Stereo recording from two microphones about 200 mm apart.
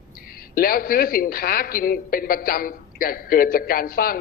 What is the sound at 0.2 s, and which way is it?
A man's voice, 45° left (ahead or behind).